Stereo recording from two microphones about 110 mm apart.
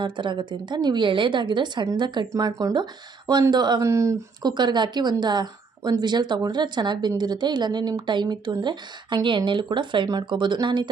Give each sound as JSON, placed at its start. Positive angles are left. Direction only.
{"t": 0.0, "sound": "a woman's voice", "side_deg": -45}
{"t": 3.8, "sound": "speech", "side_deg": -25}
{"t": 4.4, "sound": "a woman's voice", "side_deg": -40}